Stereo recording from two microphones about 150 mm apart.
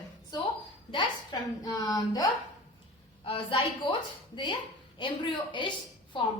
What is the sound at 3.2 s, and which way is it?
A woman's voice, 35° left (ahead or behind).